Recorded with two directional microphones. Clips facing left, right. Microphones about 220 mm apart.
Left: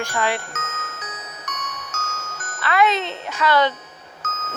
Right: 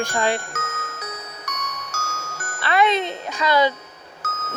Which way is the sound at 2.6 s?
25° right (ahead or behind).